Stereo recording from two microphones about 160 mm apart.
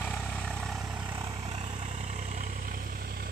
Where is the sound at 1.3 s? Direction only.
40° right (ahead or behind).